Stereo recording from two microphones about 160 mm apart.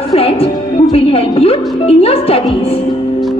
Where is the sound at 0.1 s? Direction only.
35° left (ahead or behind).